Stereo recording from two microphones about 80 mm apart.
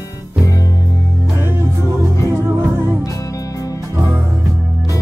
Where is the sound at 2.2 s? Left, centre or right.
Right.